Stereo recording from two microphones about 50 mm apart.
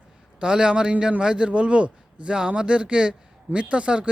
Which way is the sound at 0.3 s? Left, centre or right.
Centre.